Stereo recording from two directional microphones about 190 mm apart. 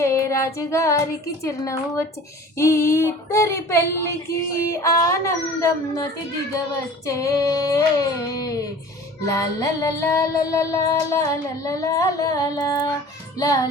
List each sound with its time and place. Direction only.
0.0 s child singing: 15° left (ahead or behind)
1.6 s music: 15° left (ahead or behind)
9.2 s music: 15° left (ahead or behind)